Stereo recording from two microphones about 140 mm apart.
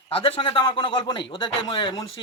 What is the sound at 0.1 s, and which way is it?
A man's voice, 40° left (ahead or behind).